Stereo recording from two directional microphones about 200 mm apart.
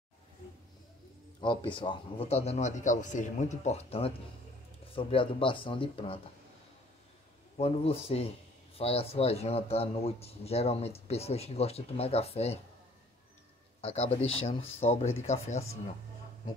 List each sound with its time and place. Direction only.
1.4 s speech: 25° left (ahead or behind)
7.5 s speech: 30° left (ahead or behind)
13.7 s speech: 30° left (ahead or behind)